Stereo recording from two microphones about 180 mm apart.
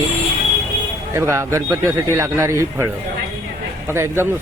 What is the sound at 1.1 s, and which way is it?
Speech, 15° right (ahead or behind).